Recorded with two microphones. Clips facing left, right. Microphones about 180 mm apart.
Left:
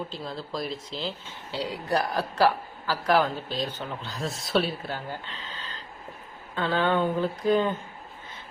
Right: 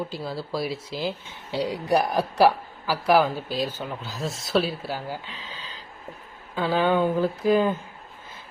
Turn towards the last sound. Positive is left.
turn(degrees=-5)  # may be behind; listen again after turning